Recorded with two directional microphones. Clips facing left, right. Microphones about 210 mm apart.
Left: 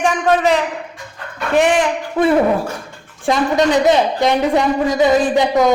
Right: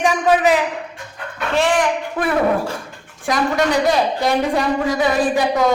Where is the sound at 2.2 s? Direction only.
25° left (ahead or behind).